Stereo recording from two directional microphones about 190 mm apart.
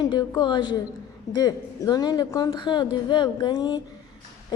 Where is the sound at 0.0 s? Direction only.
20° left (ahead or behind).